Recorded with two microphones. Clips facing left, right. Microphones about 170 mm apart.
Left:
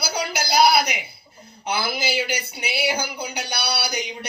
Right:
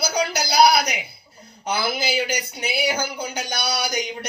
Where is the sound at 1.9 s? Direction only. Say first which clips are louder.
Right 1 dB; 45° right (ahead or behind).